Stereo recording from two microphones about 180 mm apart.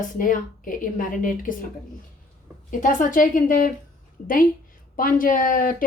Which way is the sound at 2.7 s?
45° left (ahead or behind).